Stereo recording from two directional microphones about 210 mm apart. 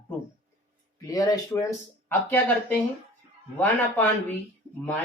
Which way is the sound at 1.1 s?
15° left (ahead or behind).